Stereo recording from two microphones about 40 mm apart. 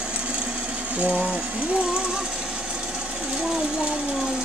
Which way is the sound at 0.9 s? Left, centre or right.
Right.